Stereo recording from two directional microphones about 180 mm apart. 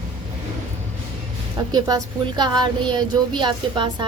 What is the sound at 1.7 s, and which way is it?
A woman's voice, 20° right (ahead or behind).